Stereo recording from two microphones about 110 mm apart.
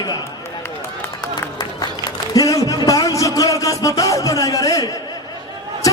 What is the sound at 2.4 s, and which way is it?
A man's voice, 30° left (ahead or behind).